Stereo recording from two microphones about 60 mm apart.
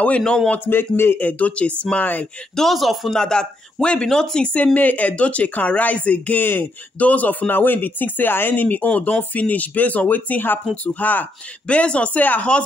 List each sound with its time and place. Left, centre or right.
0.7 s a man's voice: left
1.2 s speech: left
2.5 s a man's voice: centre
3.2 s speech: centre; by 11.2 s left
11.6 s speech: centre